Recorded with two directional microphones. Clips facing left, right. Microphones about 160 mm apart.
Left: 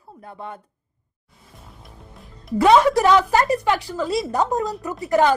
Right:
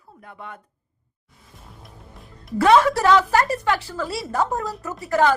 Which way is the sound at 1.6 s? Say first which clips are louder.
Right 1 dB; centre (ahead or behind).